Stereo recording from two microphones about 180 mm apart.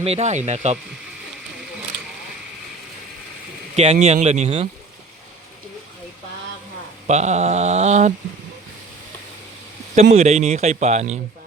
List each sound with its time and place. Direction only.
0.0 s a man's voice: 35° right (ahead or behind)
3.8 s a man's voice: 35° right (ahead or behind)
7.1 s a man's voice: 40° right (ahead or behind)
9.9 s a man's voice: 40° right (ahead or behind)